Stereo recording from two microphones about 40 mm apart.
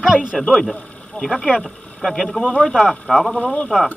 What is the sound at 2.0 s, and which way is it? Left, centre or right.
Speech, centre.